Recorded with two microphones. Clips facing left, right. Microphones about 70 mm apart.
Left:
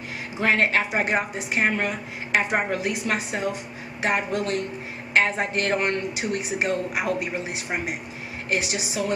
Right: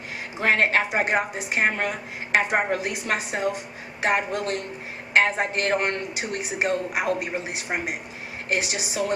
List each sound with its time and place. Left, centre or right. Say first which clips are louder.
0.4 s speech: even; right